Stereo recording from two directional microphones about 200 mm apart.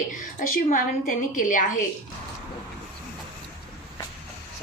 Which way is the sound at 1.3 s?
40° left (ahead or behind).